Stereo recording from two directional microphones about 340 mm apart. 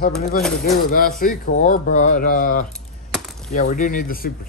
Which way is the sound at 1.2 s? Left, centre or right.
Left.